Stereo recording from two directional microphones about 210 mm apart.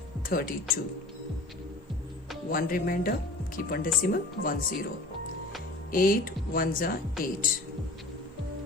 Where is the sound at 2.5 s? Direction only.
40° left (ahead or behind).